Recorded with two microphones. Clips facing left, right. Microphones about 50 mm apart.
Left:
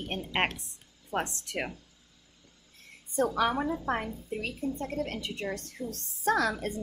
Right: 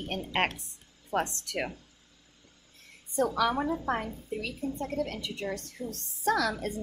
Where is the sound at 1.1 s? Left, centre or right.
Centre.